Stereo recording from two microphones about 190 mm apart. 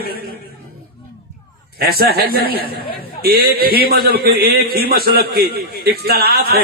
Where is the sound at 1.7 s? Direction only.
55° right (ahead or behind).